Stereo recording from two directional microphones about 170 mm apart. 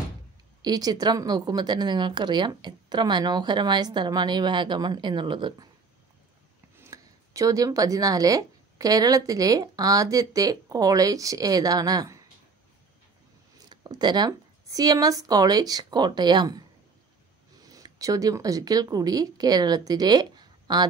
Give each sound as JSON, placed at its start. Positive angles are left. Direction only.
{"t": 0.6, "sound": "a woman's voice", "side_deg": -25}
{"t": 6.8, "sound": "speech", "side_deg": -20}
{"t": 13.7, "sound": "speech", "side_deg": -25}